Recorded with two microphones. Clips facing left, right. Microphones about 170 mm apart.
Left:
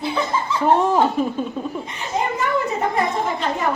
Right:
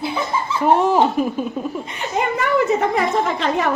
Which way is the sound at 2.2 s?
60° right (ahead or behind).